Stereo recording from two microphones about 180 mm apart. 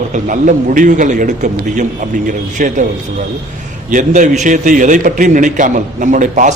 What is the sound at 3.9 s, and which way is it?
A man's voice, 45° right (ahead or behind).